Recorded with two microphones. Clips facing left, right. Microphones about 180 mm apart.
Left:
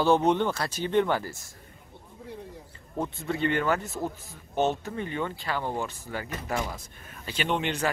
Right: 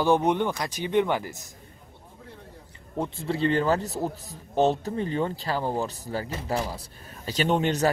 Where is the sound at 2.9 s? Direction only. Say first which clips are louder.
Right 2 dB; 25° right (ahead or behind).